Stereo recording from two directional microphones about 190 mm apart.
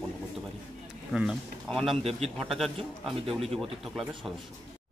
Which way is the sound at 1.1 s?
Centre (ahead or behind).